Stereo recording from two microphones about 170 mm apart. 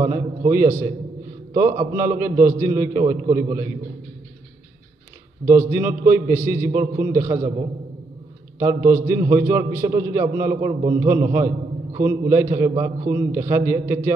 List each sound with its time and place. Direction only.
0.1 s a man's voice: 15° right (ahead or behind)
5.4 s a man's voice: 15° right (ahead or behind)
8.5 s a man's voice: 15° right (ahead or behind)